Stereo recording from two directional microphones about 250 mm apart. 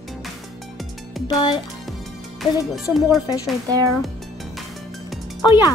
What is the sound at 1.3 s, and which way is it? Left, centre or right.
Speech, centre.